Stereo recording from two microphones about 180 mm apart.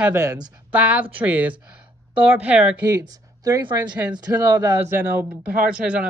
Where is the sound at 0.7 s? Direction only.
5° right (ahead or behind).